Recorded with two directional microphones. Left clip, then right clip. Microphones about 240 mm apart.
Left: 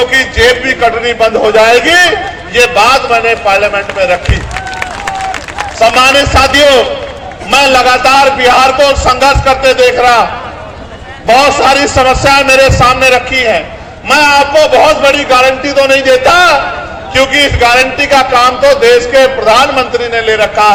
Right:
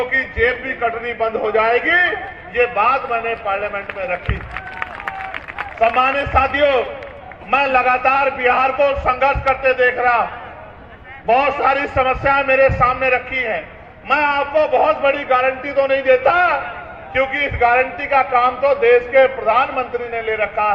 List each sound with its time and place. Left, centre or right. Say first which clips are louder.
0.1 s a man's voice: left 10 dB; right
6.0 s a man's voice: left 11 dB; right
11.3 s a man's voice: left 9 dB; right